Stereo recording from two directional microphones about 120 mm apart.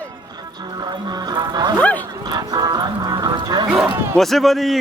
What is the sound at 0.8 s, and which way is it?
Music, 35° right (ahead or behind).